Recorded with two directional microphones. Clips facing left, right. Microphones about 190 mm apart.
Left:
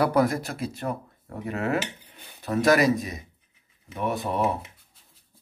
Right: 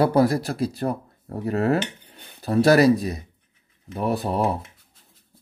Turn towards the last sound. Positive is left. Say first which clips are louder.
# right 3 dB
turn(degrees=-35)  # may be behind; listen again after turning